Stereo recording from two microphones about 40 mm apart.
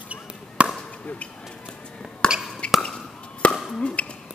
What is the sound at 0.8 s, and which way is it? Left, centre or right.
Chop, left.